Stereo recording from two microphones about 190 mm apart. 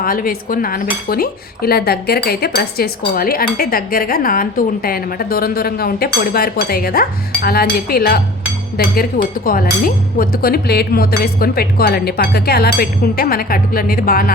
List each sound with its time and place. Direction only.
0.0 s speech: 50° left (ahead or behind)